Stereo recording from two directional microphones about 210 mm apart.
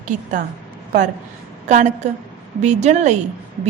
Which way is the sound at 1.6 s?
35° right (ahead or behind).